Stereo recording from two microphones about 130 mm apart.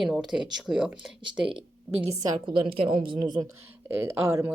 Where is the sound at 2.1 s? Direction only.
30° right (ahead or behind).